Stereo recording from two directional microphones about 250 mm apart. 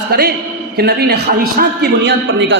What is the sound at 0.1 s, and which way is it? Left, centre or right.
A man's voice, right.